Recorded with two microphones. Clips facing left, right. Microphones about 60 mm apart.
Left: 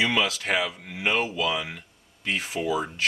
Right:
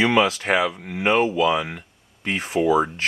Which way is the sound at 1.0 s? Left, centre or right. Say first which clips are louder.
Right 7 dB; right.